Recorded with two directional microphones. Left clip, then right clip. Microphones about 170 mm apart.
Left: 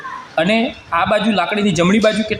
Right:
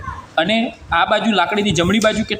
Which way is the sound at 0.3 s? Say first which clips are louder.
Left 1 dB; 20° left (ahead or behind).